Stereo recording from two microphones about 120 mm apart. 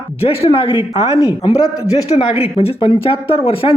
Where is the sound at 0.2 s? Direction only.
50° left (ahead or behind).